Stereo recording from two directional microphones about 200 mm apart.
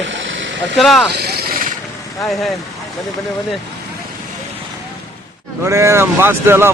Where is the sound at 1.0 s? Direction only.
55° right (ahead or behind).